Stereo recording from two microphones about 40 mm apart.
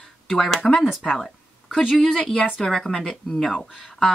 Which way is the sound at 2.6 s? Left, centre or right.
Centre.